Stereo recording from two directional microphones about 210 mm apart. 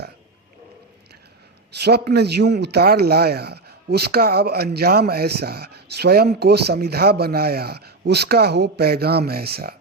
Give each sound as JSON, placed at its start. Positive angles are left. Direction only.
{"t": 1.8, "sound": "a man's voice", "side_deg": -50}